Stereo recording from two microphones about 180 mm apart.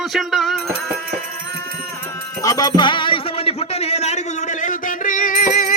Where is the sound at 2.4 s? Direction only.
20° left (ahead or behind).